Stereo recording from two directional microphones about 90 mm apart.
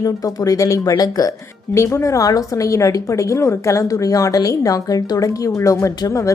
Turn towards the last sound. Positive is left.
turn(degrees=35)  # may be behind; listen again after turning